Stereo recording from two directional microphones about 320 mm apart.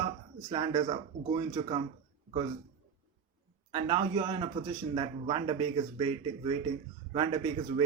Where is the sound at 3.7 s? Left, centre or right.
Centre.